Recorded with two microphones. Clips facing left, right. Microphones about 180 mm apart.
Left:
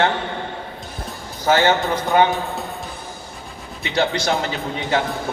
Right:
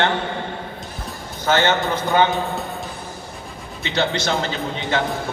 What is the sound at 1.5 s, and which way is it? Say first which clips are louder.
A man's voice: even; centre (ahead or behind).